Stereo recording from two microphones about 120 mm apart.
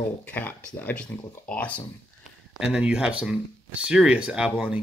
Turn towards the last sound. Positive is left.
turn(degrees=-10)  # may be behind; listen again after turning